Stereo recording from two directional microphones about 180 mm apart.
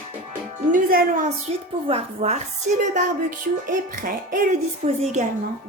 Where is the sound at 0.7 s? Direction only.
50° right (ahead or behind).